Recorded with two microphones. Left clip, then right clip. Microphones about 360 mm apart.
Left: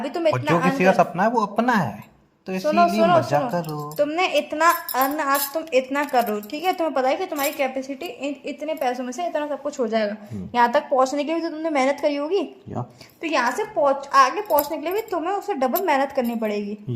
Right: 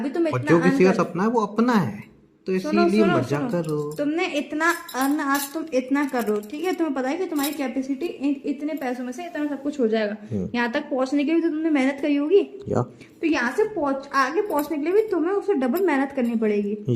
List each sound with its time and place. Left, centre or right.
0.0 s a woman's voice: centre